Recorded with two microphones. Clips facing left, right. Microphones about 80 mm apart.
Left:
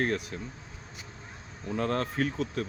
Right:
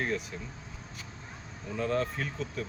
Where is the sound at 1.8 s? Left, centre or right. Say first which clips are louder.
Left 2 dB; left.